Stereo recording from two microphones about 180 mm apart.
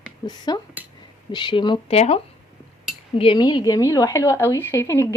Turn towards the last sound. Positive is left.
turn(degrees=15)  # may be behind; listen again after turning